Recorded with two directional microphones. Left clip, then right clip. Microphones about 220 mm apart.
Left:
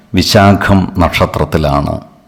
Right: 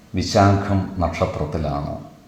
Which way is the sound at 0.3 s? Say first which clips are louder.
Left 8 dB; 40° left (ahead or behind).